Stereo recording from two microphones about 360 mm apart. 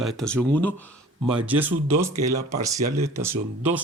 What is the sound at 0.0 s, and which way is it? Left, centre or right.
Speech, centre.